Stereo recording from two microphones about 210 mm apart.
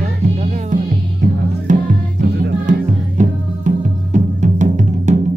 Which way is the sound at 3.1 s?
35° right (ahead or behind).